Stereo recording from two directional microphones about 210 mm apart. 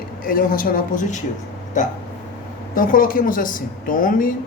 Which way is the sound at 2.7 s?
40° left (ahead or behind).